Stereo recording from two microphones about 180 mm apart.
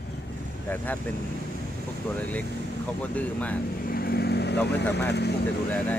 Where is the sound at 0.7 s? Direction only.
10° left (ahead or behind).